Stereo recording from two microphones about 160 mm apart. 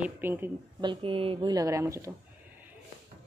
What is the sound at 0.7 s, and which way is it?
Speech, 30° right (ahead or behind).